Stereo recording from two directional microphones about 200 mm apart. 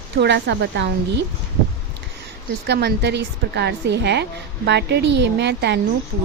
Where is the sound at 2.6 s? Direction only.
55° right (ahead or behind).